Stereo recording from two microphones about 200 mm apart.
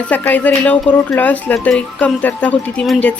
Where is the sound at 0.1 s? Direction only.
10° left (ahead or behind).